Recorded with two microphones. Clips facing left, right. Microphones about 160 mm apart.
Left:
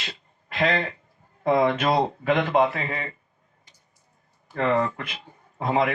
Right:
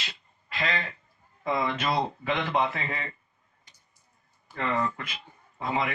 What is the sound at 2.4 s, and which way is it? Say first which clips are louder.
Speech: left 6 dB; 50° left (ahead or behind).